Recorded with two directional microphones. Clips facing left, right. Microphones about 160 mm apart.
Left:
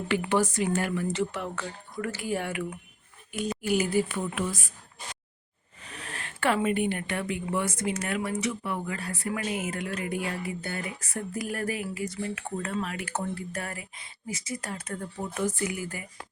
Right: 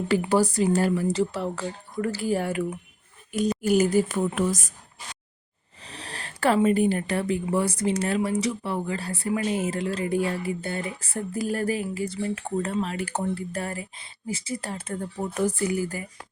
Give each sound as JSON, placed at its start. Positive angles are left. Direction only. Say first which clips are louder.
{"t": 0.2, "sound": "a woman's voice", "louder": "right 4 dB", "side_deg": -35}
{"t": 5.8, "sound": "a woman's voice", "louder": "right 2 dB", "side_deg": -30}